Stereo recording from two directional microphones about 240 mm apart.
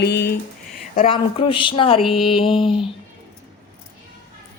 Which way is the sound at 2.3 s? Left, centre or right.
Left.